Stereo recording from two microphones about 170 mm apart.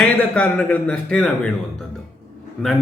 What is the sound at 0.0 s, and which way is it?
A man's voice, 5° left (ahead or behind).